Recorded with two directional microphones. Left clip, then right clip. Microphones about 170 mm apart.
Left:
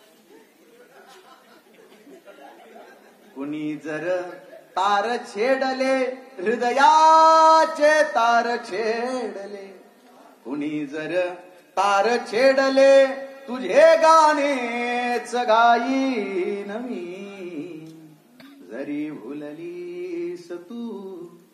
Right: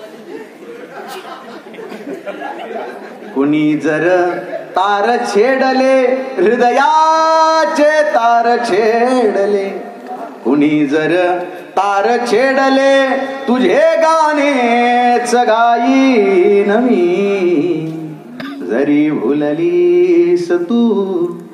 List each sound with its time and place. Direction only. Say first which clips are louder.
3.3 s a man's voice: right 17 dB; 30° right (ahead or behind)
18.7 s a man's voice: right 17 dB; 30° right (ahead or behind)